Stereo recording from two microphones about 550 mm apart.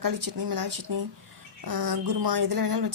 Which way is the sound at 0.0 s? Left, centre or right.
Right.